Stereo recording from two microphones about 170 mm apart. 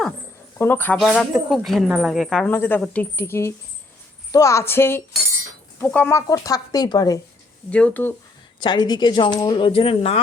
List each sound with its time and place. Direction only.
0.6 s a woman's voice: 10° left (ahead or behind)
7.7 s a woman's voice: 10° left (ahead or behind)
8.6 s speech: 25° left (ahead or behind)